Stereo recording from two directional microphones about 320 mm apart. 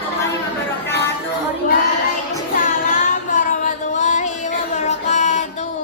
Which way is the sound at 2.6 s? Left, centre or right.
Left.